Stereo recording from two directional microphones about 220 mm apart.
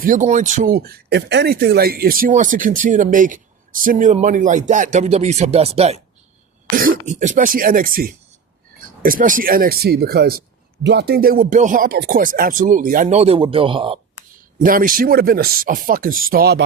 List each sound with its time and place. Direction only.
0.0 s speech: 35° right (ahead or behind)
6.7 s throat clearing: 40° right (ahead or behind)
7.1 s speech: 35° right (ahead or behind)
14.6 s speech: 40° right (ahead or behind)